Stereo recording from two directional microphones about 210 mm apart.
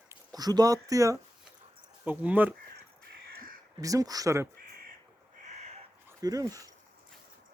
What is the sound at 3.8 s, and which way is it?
Speech, 15° right (ahead or behind).